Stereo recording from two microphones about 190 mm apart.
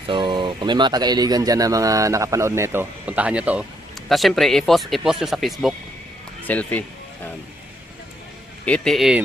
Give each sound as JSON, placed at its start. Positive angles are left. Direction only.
{"t": 0.1, "sound": "speech", "side_deg": -25}
{"t": 8.6, "sound": "speech", "side_deg": 5}